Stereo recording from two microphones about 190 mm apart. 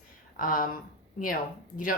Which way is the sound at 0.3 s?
45° left (ahead or behind).